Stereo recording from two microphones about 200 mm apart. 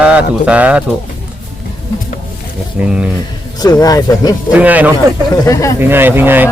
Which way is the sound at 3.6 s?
20° left (ahead or behind).